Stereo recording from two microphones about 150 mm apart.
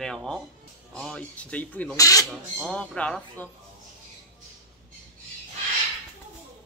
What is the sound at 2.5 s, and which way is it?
Speech, 5° left (ahead or behind).